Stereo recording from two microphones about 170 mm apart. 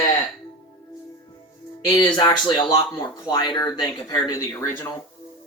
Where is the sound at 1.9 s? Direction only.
25° left (ahead or behind).